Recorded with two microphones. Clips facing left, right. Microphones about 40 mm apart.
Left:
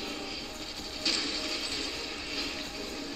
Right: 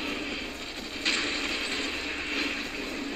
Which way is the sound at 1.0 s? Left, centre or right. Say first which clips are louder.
Right 4 dB; right.